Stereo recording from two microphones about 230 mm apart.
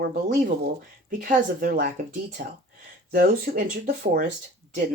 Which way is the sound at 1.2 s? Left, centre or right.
Right.